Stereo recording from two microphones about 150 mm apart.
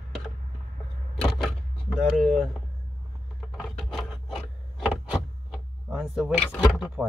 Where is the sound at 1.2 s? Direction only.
Centre (ahead or behind).